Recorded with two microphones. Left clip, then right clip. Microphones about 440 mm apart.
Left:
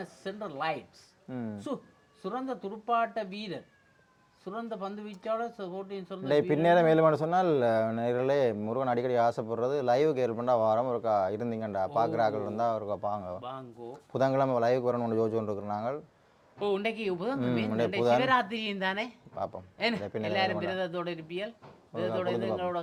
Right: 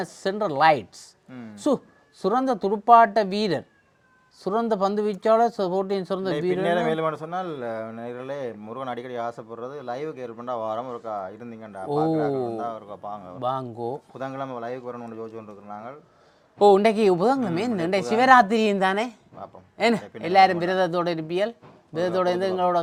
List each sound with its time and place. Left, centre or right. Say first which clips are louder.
0.0 s speech: right 13 dB; right
6.3 s speech: left 1 dB; left
13.4 s speech: right 14 dB; right
14.1 s a man's voice: left 5 dB; left
16.6 s speech: right 14 dB; right